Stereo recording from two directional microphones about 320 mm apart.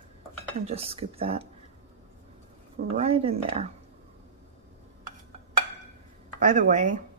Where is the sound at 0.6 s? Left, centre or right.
Centre.